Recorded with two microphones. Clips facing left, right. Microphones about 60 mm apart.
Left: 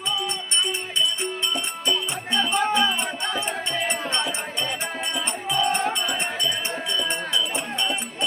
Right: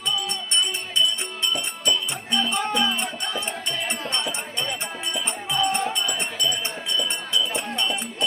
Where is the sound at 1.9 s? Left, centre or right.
Centre.